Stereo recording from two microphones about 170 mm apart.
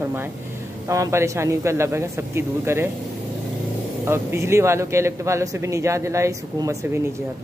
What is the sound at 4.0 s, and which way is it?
A man's voice, 15° right (ahead or behind).